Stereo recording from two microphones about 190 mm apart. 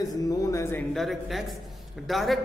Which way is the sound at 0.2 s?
20° left (ahead or behind).